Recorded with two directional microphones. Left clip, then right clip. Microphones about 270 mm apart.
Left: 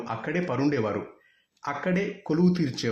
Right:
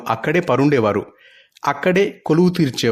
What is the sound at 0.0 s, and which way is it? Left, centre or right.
Speech, right.